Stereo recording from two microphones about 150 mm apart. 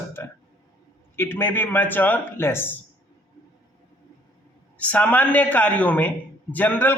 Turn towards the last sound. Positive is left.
turn(degrees=10)  # may be behind; listen again after turning